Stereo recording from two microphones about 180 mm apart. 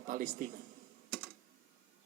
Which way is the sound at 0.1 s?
50° right (ahead or behind).